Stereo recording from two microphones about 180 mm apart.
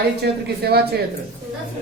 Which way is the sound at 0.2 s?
60° right (ahead or behind).